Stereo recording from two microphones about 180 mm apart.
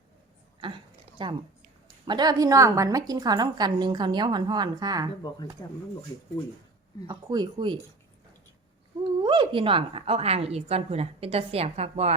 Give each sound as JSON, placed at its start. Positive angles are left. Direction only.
{"t": 1.2, "sound": "a woman's voice", "side_deg": -25}
{"t": 5.2, "sound": "speech", "side_deg": 25}
{"t": 7.1, "sound": "a woman's voice", "side_deg": -25}
{"t": 9.2, "sound": "speech", "side_deg": -25}